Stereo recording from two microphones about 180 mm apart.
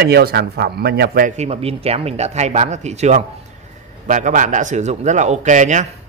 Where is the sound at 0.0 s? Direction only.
65° right (ahead or behind).